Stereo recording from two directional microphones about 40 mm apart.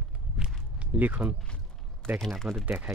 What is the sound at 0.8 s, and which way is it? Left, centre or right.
Speech, right.